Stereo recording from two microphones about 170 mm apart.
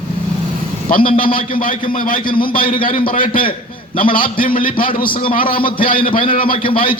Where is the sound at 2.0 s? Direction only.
55° left (ahead or behind).